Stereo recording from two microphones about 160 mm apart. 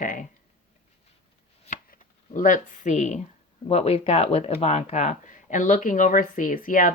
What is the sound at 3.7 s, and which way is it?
Speech, 40° left (ahead or behind).